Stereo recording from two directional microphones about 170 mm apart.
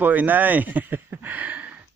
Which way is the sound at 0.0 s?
10° right (ahead or behind).